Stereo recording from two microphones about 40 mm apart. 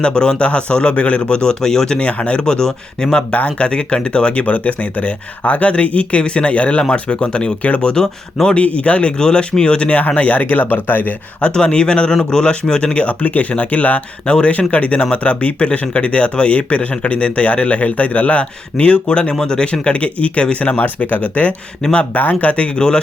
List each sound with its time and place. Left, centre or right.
0.0 s a man's voice: left
2.0 s a man's voice: left
3.3 s a man's voice: left
8.0 s speech: centre
8.5 s a man's voice: left
10.5 s speech: left
11.5 s a man's voice: left